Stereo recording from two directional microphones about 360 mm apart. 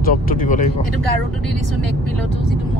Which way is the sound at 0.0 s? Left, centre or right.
Left.